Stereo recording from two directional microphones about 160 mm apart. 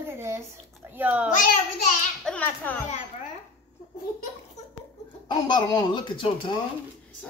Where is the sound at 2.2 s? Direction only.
10° left (ahead or behind).